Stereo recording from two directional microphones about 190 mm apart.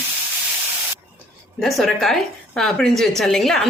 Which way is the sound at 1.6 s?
Centre (ahead or behind).